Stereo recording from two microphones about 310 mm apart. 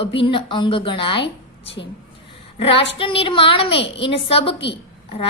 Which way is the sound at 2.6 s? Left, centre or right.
Centre.